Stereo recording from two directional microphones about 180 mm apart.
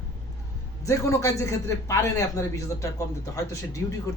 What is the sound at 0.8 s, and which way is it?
A man's voice, 15° left (ahead or behind).